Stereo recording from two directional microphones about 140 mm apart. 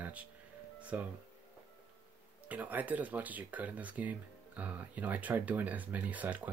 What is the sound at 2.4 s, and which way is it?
Speech, 10° right (ahead or behind).